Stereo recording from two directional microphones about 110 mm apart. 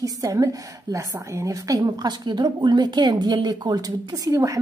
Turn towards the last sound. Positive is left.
turn(degrees=-30)  # may be behind; listen again after turning